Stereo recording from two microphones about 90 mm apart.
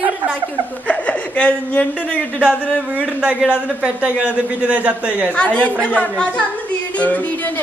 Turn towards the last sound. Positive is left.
turn(degrees=15)  # may be behind; listen again after turning